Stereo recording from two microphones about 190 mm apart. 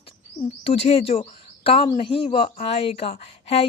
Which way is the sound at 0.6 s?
30° left (ahead or behind).